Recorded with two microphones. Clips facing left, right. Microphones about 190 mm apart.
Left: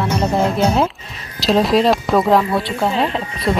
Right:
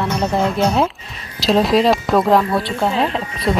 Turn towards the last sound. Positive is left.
turn(degrees=0)  # may be behind; listen again after turning